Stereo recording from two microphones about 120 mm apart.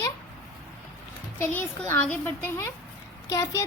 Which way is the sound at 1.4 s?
20° left (ahead or behind).